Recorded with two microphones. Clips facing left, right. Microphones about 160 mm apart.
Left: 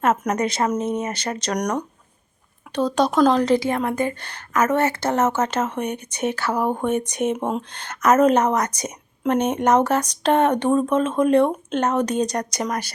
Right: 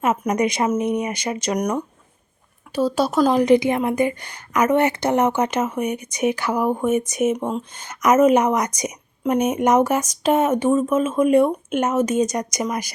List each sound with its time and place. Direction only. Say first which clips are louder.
0.3 s a woman's voice: right 2 dB; 15° right (ahead or behind); by 7.6 s 5° left (ahead or behind)
7.7 s a woman's voice: right 1 dB; 10° right (ahead or behind)